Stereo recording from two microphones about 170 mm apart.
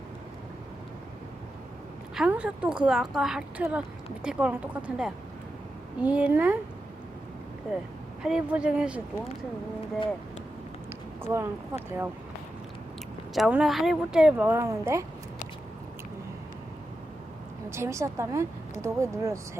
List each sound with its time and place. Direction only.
2.1 s a woman's voice: 5° right (ahead or behind)
8.2 s a woman's voice: 5° right (ahead or behind)
11.2 s speech: 15° right (ahead or behind)
13.3 s a woman's voice: 5° right (ahead or behind)
17.7 s speech: 15° right (ahead or behind)